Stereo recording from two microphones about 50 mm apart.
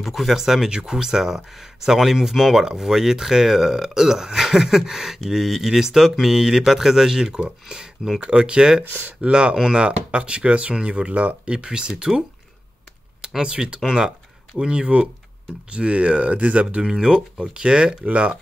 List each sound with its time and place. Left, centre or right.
0.0 s speech: centre
8.2 s speech: right
13.4 s speech: centre
16.8 s speech: centre